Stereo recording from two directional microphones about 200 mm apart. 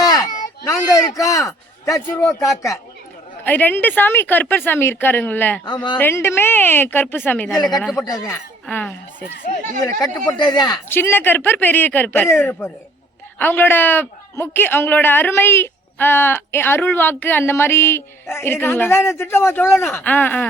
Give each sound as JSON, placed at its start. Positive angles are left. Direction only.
{"t": 0.0, "sound": "a sound", "side_deg": 20}
{"t": 0.6, "sound": "a man's voice", "side_deg": 15}
{"t": 5.6, "sound": "speech", "side_deg": 20}
{"t": 6.0, "sound": "a man's voice", "side_deg": 10}
{"t": 8.6, "sound": "speech", "side_deg": 5}
{"t": 10.0, "sound": "a man's voice", "side_deg": 20}